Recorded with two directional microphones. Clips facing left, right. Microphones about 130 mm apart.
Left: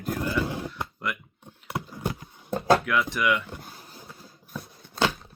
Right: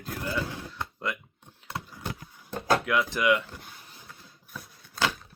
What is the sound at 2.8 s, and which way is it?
Speech, 25° right (ahead or behind).